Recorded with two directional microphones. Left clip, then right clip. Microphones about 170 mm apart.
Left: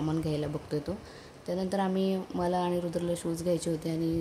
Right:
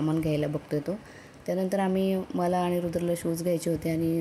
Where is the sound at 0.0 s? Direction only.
25° right (ahead or behind).